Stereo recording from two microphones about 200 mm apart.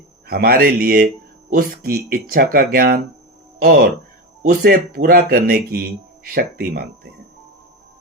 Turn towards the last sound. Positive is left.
turn(degrees=-50)  # may be behind; listen again after turning